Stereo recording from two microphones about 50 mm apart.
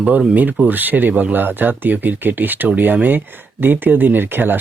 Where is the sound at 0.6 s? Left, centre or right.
Right.